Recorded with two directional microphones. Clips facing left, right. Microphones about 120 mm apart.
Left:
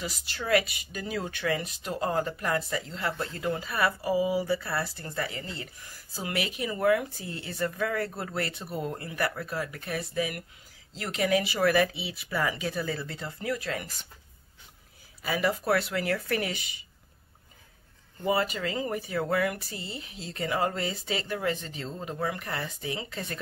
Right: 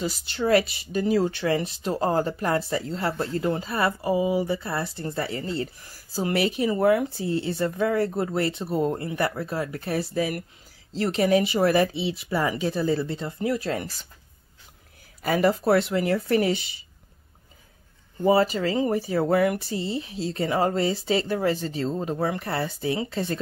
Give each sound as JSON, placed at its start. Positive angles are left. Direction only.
{"t": 0.0, "sound": "speech", "side_deg": -30}
{"t": 15.2, "sound": "speech", "side_deg": -45}
{"t": 15.5, "sound": "speech", "side_deg": -30}
{"t": 18.2, "sound": "speech", "side_deg": -30}